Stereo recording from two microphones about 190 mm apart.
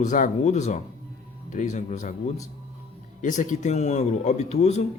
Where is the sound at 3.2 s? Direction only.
40° left (ahead or behind).